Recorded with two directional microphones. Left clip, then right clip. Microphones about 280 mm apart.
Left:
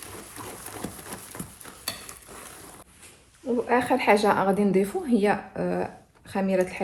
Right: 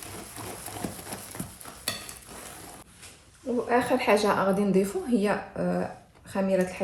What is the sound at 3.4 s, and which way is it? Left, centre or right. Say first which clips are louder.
Speech: left 2 dB; left.